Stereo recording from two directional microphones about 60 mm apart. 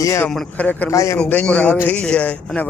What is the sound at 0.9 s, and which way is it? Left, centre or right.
Speech, left.